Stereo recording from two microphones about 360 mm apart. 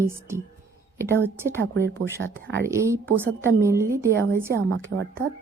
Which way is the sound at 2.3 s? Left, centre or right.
Right.